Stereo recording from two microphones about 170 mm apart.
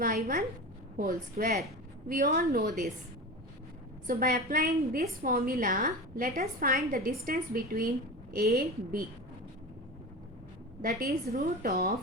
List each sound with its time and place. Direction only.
0.9 s a woman's voice: 55° right (ahead or behind)
4.0 s a woman's voice: 60° right (ahead or behind)
10.8 s a woman's voice: 60° right (ahead or behind)